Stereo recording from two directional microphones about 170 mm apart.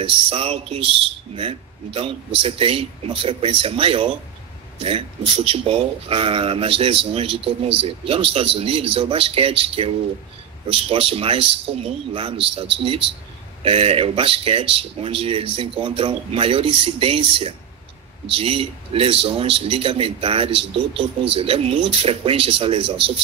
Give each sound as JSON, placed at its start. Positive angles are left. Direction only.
{"t": 0.0, "sound": "a man's voice", "side_deg": -35}